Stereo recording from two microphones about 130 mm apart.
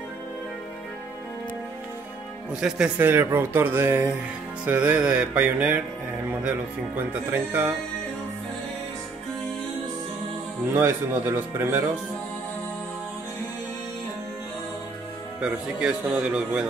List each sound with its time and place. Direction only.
2.6 s speech: 10° right (ahead or behind)
7.0 s speech: 15° right (ahead or behind)
10.7 s speech: 20° right (ahead or behind)
15.4 s speech: 5° right (ahead or behind)